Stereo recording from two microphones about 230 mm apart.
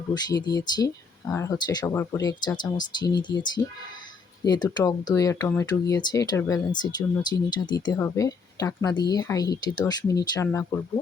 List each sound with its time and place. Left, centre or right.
0.1 s speech: centre